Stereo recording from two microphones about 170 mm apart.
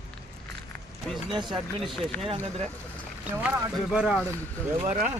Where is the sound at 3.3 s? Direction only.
10° right (ahead or behind).